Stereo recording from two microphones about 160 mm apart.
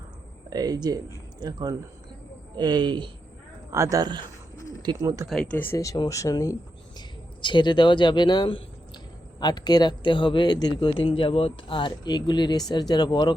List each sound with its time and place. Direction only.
0.5 s speech: 25° right (ahead or behind)
5.3 s speech: 5° left (ahead or behind); by 13.3 s 25° left (ahead or behind)